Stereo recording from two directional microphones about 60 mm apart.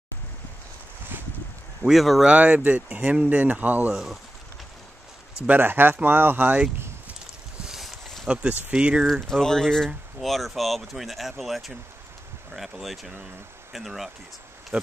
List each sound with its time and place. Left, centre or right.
1.9 s speech: centre
2.2 s speech: right
3.9 s speech: centre
5.5 s speech: right
7.6 s a sound: centre
8.3 s speech: right
9.2 s speech: centre
14.7 s speech: right